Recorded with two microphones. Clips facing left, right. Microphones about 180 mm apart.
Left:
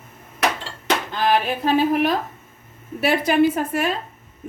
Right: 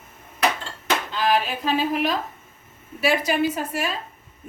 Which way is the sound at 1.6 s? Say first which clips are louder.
Left 5 dB; 50° left (ahead or behind).